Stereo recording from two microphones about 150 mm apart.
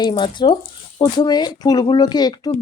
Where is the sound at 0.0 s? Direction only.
30° left (ahead or behind).